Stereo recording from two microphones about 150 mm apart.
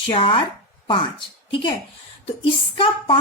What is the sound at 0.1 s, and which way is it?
Speech, 35° left (ahead or behind).